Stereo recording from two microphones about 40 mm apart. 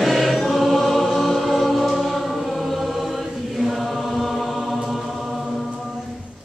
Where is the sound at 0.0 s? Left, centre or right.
Centre.